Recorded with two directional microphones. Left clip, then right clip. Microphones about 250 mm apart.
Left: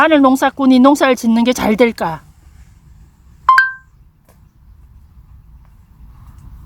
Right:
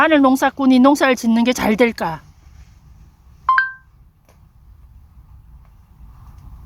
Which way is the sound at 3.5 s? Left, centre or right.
Left.